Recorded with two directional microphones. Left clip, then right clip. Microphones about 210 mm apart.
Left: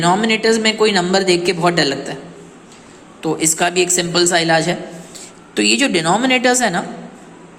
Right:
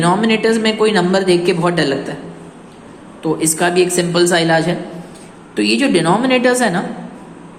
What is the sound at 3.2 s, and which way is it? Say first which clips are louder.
A woman's voice: right 1 dB; 20° left (ahead or behind).